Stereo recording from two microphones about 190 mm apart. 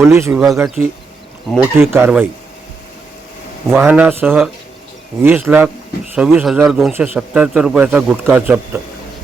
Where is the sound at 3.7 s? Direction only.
10° right (ahead or behind).